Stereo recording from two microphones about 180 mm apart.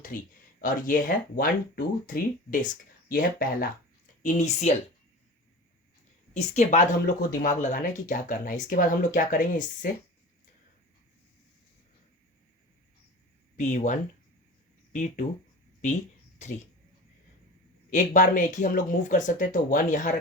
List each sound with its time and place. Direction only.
0.6 s speech: 50° left (ahead or behind)
4.2 s speech: 40° left (ahead or behind)
6.3 s speech: 40° left (ahead or behind)
13.6 s speech: 40° left (ahead or behind)
17.9 s speech: 45° left (ahead or behind)